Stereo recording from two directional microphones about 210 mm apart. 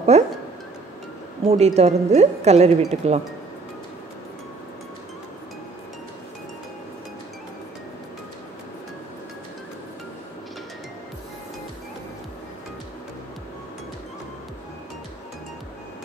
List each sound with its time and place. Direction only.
0.1 s speech: 30° right (ahead or behind)
1.5 s a woman's voice: 30° right (ahead or behind)